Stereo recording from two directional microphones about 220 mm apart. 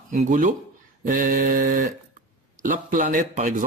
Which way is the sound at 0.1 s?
35° right (ahead or behind).